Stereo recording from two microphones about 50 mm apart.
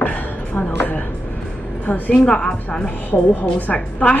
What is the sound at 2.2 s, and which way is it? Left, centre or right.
Speech, centre.